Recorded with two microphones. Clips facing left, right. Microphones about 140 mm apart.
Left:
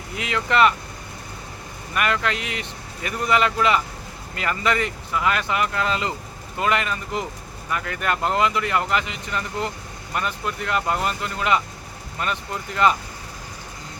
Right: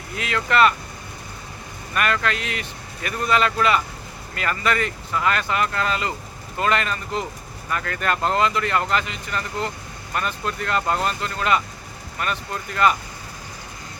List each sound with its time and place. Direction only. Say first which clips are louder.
0.2 s speech: even; 20° left (ahead or behind)
1.9 s speech: even; 15° left (ahead or behind)